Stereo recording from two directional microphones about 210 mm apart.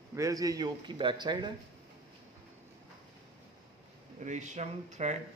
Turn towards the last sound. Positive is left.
turn(degrees=-35)  # may be behind; listen again after turning